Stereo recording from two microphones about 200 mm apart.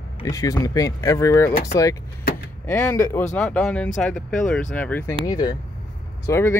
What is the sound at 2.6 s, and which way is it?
Speech, 10° left (ahead or behind).